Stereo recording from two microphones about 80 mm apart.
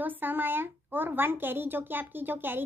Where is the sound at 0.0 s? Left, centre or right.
Right.